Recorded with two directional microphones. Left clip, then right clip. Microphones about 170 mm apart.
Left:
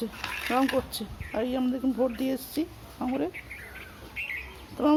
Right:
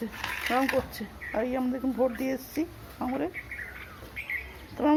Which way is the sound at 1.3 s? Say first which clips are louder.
Even; 15° left (ahead or behind).